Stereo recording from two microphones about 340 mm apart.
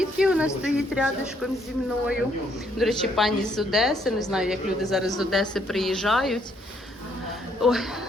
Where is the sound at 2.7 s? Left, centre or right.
Centre.